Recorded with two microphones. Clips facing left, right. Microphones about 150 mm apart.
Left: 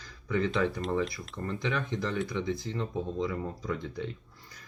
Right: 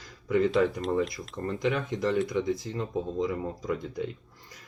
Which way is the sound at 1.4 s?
25° right (ahead or behind).